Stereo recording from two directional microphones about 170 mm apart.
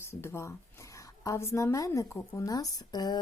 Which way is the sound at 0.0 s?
15° left (ahead or behind).